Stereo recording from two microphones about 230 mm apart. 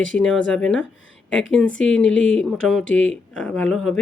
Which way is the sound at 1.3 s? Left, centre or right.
Left.